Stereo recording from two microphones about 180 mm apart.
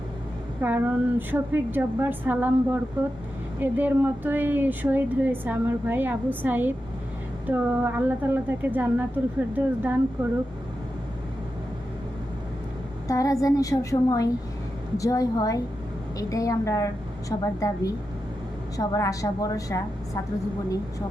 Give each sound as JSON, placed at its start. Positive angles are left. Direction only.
{"t": 0.6, "sound": "speech", "side_deg": -10}
{"t": 3.6, "sound": "speech", "side_deg": -10}
{"t": 13.1, "sound": "a woman's voice", "side_deg": 20}